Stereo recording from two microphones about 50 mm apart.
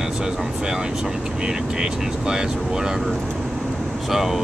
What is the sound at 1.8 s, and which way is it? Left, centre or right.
Speech, centre.